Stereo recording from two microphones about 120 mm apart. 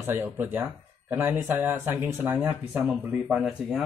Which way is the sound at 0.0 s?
15° right (ahead or behind).